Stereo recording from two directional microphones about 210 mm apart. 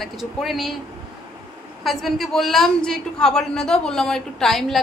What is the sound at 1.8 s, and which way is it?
A woman's voice, centre (ahead or behind).